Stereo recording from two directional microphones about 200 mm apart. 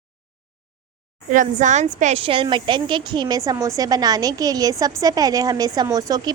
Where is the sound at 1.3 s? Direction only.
40° right (ahead or behind).